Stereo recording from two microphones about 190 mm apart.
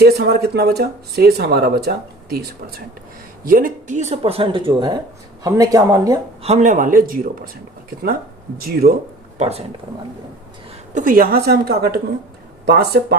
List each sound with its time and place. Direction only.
0.0 s speech: 55° right (ahead or behind); by 6.1 s 20° right (ahead or behind)
6.4 s speech: 35° right (ahead or behind); by 8.9 s 50° right (ahead or behind)
9.4 s speech: 35° right (ahead or behind)
10.9 s speech: 45° right (ahead or behind)